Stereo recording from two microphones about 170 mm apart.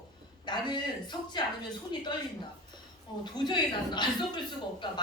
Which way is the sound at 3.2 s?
25° left (ahead or behind).